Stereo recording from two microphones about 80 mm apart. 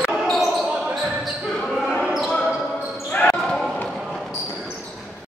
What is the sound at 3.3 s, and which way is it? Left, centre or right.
Basketball bounce, centre.